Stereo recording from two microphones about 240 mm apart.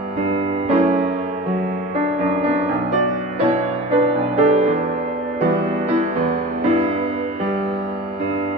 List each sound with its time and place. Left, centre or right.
0.3 s music: right
3.4 s music: right
6.6 s music: right